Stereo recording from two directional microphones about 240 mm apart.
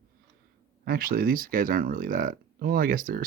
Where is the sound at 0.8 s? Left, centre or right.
Right.